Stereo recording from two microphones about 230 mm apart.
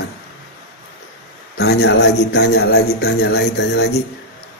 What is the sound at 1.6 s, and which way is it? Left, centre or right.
Speech, left.